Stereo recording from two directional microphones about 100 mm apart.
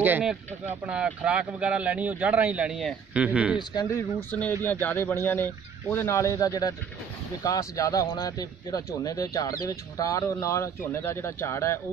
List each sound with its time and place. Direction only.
0.0 s speech: 20° right (ahead or behind)
4.3 s speech: 15° left (ahead or behind)